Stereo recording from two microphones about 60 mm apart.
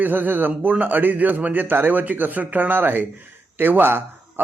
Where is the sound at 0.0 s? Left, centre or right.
Right.